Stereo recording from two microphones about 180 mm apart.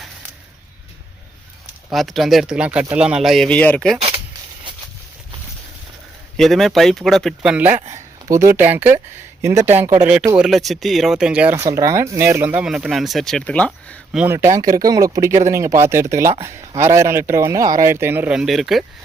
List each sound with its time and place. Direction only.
1.9 s speech: centre (ahead or behind)
6.3 s speech: centre (ahead or behind)
7.7 s speech: 40° right (ahead or behind)
8.3 s speech: 15° right (ahead or behind)
10.3 s speech: centre (ahead or behind)
12.6 s speech: 5° right (ahead or behind)
14.1 s speech: 5° right (ahead or behind)
14.3 s speech: 20° right (ahead or behind); by 18.9 s centre (ahead or behind)